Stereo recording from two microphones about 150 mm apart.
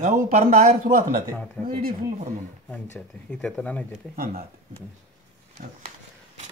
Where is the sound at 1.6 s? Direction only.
5° left (ahead or behind).